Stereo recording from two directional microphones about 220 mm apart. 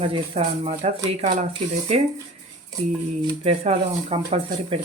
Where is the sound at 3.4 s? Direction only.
25° right (ahead or behind).